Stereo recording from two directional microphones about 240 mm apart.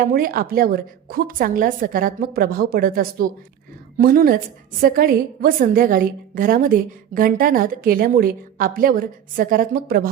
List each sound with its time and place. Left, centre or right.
0.0 s a woman's voice: right